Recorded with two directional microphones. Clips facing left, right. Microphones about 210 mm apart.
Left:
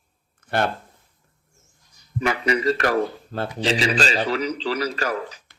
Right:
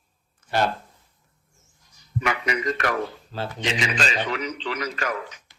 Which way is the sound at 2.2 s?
35° left (ahead or behind).